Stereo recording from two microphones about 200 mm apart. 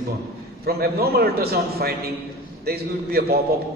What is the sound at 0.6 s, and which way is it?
A man's voice, 50° right (ahead or behind).